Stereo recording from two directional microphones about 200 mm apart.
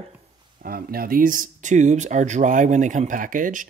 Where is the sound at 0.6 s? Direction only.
45° right (ahead or behind).